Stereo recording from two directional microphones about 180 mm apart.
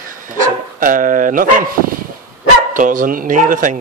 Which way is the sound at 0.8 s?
50° right (ahead or behind).